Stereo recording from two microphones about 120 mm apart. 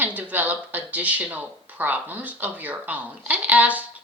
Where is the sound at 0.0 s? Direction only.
15° right (ahead or behind).